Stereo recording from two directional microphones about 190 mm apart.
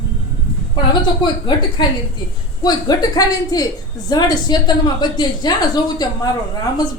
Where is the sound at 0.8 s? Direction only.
25° left (ahead or behind).